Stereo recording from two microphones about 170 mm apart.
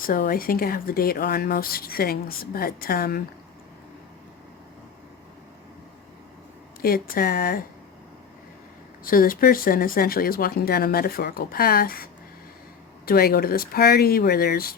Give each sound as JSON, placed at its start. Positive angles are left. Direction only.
{"t": 0.0, "sound": "speech", "side_deg": 55}
{"t": 6.8, "sound": "speech", "side_deg": 60}
{"t": 9.0, "sound": "speech", "side_deg": 55}
{"t": 13.1, "sound": "speech", "side_deg": 60}